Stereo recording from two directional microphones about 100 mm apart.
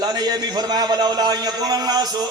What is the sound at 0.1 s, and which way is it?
A man's voice, 45° right (ahead or behind).